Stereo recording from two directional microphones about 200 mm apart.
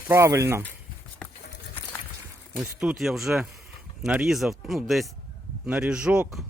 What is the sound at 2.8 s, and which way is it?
Speech, centre (ahead or behind).